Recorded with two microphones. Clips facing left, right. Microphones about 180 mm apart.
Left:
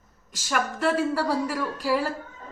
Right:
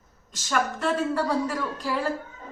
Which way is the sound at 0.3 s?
10° left (ahead or behind).